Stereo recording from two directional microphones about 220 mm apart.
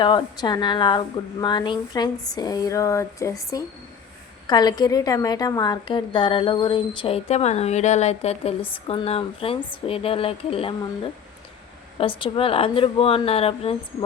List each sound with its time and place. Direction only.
0.0 s a woman's voice: 20° left (ahead or behind)
11.9 s a woman's voice: 25° left (ahead or behind)